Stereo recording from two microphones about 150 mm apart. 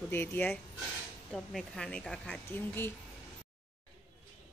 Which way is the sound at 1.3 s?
5° left (ahead or behind).